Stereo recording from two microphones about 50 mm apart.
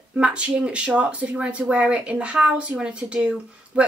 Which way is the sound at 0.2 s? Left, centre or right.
Right.